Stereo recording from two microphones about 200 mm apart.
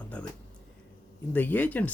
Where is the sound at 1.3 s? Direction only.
10° left (ahead or behind).